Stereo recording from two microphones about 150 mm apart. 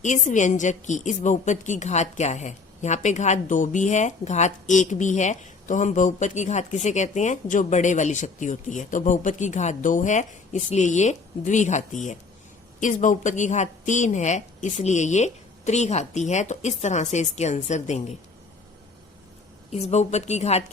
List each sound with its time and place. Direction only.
0.0 s a woman's voice: 55° left (ahead or behind)
19.7 s a woman's voice: 45° left (ahead or behind)